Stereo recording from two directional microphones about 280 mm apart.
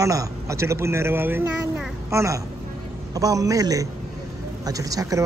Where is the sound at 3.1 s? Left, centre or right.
Centre.